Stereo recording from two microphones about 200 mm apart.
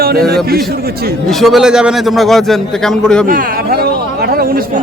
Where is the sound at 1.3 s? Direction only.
Centre (ahead or behind).